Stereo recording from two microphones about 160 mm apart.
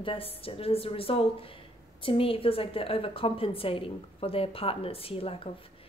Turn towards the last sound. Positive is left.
turn(degrees=35)  # may be behind; listen again after turning